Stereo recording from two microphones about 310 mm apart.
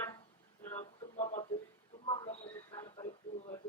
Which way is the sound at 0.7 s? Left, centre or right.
Left.